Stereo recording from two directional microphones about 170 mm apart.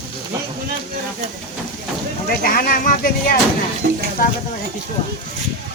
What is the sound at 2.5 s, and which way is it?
Speech, 55° left (ahead or behind).